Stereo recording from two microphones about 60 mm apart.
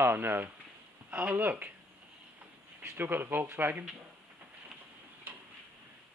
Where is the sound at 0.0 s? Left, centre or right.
Right.